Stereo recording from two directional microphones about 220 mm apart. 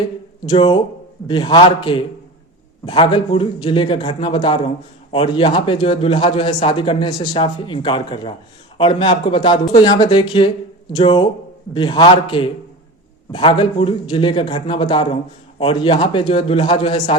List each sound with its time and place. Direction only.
0.4 s a man's voice: 20° left (ahead or behind)